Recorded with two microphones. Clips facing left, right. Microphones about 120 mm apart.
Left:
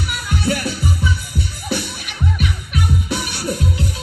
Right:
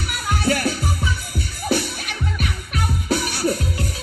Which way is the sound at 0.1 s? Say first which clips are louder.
Right 1 dB; 50° right (ahead or behind).